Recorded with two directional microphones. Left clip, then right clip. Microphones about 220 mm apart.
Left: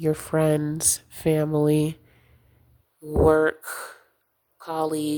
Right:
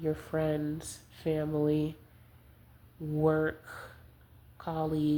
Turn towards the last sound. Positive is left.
turn(degrees=45)  # may be behind; listen again after turning